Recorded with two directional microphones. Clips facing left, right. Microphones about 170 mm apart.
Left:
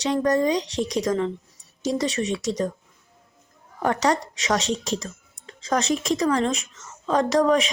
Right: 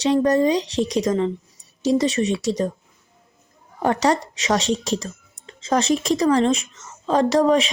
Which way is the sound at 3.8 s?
30° right (ahead or behind).